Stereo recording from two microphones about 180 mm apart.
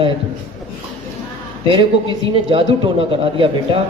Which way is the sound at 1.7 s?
30° right (ahead or behind).